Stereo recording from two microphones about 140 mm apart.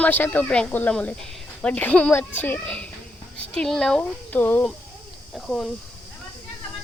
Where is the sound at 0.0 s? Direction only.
10° left (ahead or behind).